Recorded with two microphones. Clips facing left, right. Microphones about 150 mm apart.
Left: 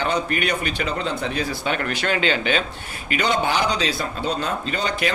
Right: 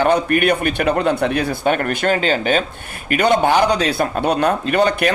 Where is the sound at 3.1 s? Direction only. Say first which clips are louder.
Right 7 dB; 55° right (ahead or behind).